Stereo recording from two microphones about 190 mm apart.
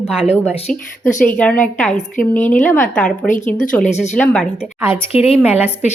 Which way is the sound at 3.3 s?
40° left (ahead or behind).